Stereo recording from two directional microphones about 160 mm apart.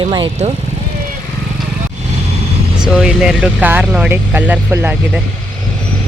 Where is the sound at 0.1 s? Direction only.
30° right (ahead or behind).